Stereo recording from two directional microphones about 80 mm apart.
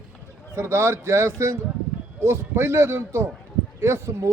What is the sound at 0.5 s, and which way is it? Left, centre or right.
Speech, right.